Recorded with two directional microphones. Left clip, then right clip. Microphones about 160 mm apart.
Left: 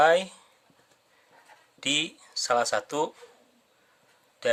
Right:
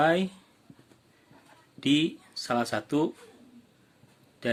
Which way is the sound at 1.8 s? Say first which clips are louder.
Right 1 dB; 20° left (ahead or behind).